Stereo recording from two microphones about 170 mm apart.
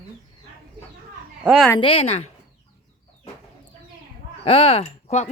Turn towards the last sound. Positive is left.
turn(degrees=40)  # may be behind; listen again after turning